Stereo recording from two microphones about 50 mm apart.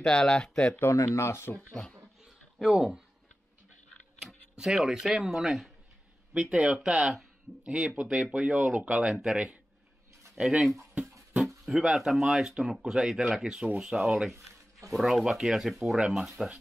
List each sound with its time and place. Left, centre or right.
0.0 s speech: centre
0.8 s speech: left
1.7 s speech: centre
2.2 s a sound: centre
4.6 s speech: centre; by 9.0 s right
9.0 s speech: centre
11.4 s a sound: centre
11.8 s speech: centre
13.4 s speech: centre
14.3 s a sound: right
14.9 s speech: centre